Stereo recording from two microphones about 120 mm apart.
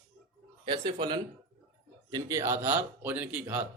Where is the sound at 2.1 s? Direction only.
25° right (ahead or behind).